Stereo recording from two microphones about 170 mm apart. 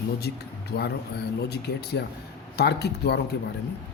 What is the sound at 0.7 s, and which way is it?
Speech, 70° left (ahead or behind).